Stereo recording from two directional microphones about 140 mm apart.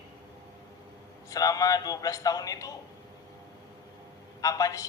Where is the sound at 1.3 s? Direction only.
25° left (ahead or behind).